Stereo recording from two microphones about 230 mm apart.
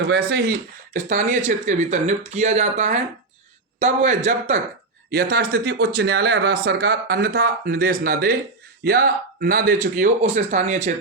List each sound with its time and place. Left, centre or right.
0.1 s speech: right
5.1 s speech: right